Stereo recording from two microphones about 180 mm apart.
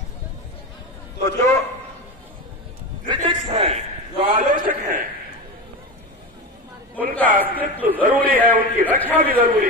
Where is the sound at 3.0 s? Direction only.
30° right (ahead or behind).